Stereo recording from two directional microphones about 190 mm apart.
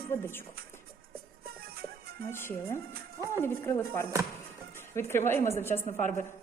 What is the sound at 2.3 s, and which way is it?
A man's voice, 10° left (ahead or behind).